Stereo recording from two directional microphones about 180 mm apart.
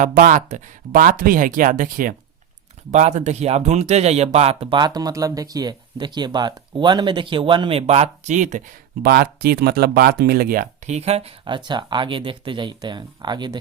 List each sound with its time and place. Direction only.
0.0 s speech: 45° right (ahead or behind)
9.0 s speech: 60° right (ahead or behind); by 13.6 s 25° right (ahead or behind)